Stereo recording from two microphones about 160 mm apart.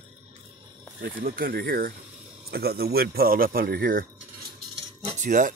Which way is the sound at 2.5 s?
75° right (ahead or behind).